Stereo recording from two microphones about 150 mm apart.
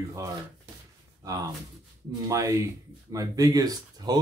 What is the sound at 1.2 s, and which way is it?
Speech, 25° right (ahead or behind).